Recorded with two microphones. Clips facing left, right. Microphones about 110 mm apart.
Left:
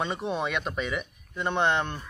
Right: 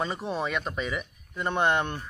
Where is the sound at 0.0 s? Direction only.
Centre (ahead or behind).